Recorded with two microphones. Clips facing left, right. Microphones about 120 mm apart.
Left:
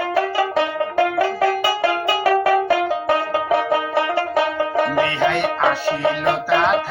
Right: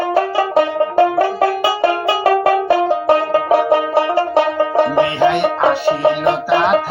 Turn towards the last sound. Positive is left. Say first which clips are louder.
# right 3 dB
turn(degrees=-20)  # may be behind; listen again after turning